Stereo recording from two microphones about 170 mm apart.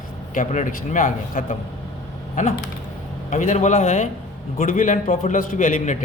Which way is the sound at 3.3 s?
45° left (ahead or behind).